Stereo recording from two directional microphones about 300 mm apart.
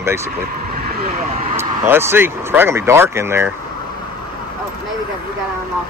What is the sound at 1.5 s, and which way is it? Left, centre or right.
Speech, centre.